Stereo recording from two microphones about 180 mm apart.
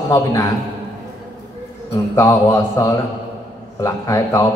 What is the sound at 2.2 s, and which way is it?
A man's voice, 15° left (ahead or behind).